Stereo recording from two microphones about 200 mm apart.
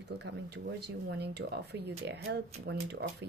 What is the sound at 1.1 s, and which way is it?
Speech, 55° right (ahead or behind).